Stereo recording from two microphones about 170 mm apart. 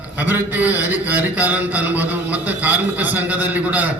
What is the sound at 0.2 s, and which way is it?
A man's voice, 10° right (ahead or behind).